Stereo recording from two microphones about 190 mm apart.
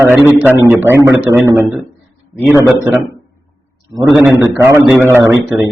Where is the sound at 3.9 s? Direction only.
20° right (ahead or behind).